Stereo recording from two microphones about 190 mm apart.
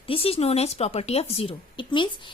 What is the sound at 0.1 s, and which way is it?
A woman's voice, 30° left (ahead or behind).